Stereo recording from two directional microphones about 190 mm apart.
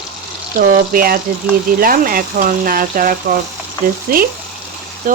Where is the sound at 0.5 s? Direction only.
50° right (ahead or behind).